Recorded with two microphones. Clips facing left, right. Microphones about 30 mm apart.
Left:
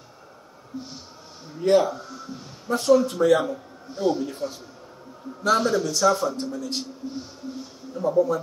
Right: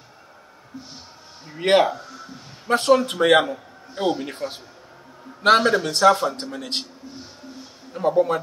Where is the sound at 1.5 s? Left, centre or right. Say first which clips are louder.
Right 2 dB; right.